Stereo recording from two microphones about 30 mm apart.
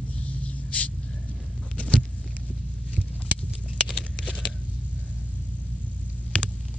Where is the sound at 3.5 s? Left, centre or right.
Right.